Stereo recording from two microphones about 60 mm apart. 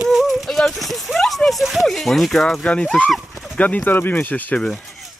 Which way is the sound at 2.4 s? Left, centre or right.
Centre.